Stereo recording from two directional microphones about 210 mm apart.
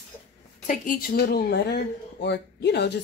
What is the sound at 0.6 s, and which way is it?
A woman's voice, 40° left (ahead or behind).